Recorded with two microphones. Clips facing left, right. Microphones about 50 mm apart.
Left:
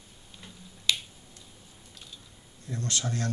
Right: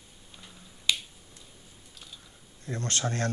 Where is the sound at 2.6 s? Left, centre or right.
Right.